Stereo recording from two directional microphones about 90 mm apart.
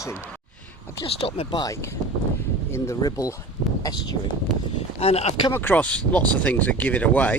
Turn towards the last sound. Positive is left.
turn(degrees=15)  # may be behind; listen again after turning